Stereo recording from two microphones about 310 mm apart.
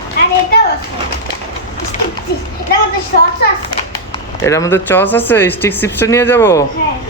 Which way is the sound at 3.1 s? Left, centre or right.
Left.